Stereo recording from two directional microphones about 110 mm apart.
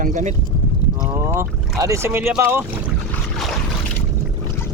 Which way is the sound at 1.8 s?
25° right (ahead or behind).